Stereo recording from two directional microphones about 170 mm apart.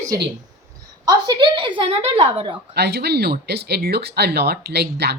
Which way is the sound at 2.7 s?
75° right (ahead or behind).